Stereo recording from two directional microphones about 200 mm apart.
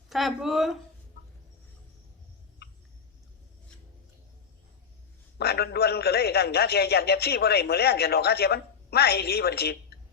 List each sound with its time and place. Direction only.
0.1 s speech: centre (ahead or behind)
5.4 s a man's voice: 50° left (ahead or behind)